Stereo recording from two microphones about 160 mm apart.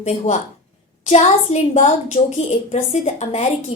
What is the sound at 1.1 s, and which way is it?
A woman's voice, 40° left (ahead or behind).